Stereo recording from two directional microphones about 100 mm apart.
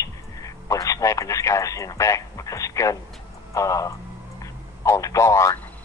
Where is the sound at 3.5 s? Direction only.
35° left (ahead or behind).